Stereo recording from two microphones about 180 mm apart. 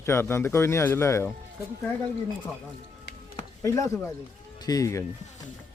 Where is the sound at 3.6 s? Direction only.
15° left (ahead or behind).